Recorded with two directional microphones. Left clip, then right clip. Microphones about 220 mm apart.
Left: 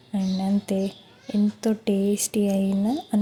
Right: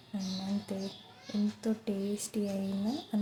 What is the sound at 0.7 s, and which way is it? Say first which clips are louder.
A woman's voice: left 13 dB; 40° left (ahead or behind).